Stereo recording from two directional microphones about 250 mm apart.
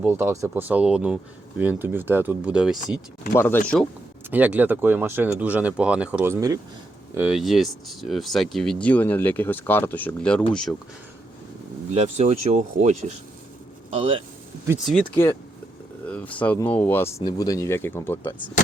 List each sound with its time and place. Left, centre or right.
0.0 s speech: centre
3.3 s speech: centre
4.3 s speech: centre
11.9 s speech: right
15.0 s speech: centre